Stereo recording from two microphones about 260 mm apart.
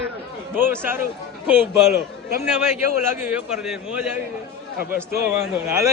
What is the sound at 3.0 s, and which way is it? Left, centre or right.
A man's voice, centre.